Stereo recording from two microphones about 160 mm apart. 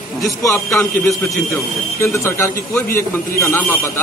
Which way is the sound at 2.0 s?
15° left (ahead or behind).